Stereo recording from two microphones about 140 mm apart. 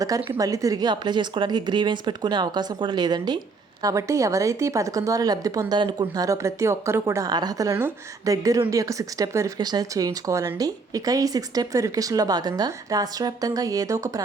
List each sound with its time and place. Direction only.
0.3 s a woman's voice: 25° right (ahead or behind)